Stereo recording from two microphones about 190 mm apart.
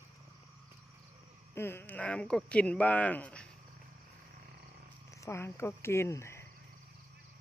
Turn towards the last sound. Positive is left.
turn(degrees=15)  # may be behind; listen again after turning